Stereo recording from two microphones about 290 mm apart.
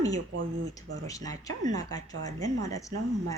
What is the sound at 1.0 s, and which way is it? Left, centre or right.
Speech, centre.